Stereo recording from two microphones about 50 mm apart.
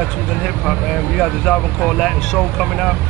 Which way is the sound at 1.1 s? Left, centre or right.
Centre.